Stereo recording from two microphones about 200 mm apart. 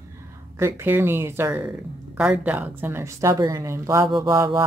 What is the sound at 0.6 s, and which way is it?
A woman's voice, 10° right (ahead or behind).